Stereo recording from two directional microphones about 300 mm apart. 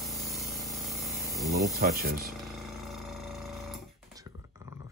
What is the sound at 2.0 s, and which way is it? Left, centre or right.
Speech, right.